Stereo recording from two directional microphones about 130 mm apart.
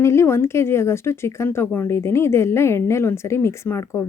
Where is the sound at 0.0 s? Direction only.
20° left (ahead or behind).